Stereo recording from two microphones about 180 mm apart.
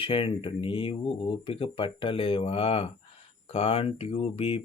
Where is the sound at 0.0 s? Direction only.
30° left (ahead or behind).